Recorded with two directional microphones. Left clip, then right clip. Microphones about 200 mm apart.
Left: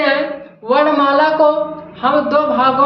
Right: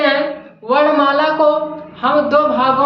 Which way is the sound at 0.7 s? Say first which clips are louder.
Even; 10° left (ahead or behind).